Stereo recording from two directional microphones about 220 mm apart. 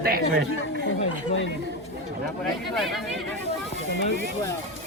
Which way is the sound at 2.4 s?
Centre (ahead or behind).